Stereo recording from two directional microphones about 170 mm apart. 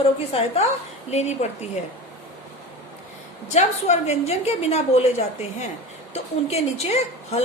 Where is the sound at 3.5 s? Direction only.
40° left (ahead or behind).